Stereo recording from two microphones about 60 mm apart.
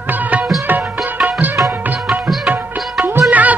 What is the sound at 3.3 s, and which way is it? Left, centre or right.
Music, right.